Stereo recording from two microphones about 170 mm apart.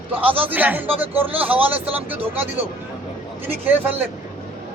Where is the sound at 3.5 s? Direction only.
10° right (ahead or behind).